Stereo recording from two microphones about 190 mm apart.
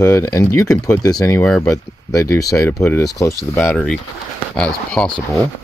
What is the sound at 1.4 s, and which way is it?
Speech, 5° left (ahead or behind).